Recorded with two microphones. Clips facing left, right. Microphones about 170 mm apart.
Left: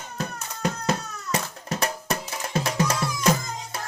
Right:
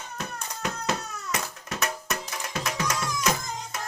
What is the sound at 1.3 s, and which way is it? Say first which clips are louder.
Music: left 5 dB; 30° left (ahead or behind).